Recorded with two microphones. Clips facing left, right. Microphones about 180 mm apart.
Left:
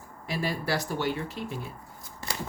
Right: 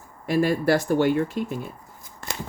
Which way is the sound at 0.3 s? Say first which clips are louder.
Right 10 dB; 50° right (ahead or behind).